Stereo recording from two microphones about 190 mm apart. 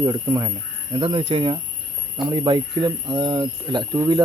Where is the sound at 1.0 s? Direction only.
30° right (ahead or behind).